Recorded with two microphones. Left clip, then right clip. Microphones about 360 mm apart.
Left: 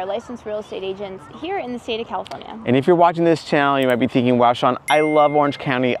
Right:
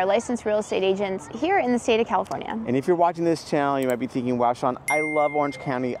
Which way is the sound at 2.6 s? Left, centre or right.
Left.